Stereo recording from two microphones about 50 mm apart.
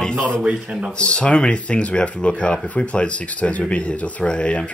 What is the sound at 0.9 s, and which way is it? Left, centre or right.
Speech, left.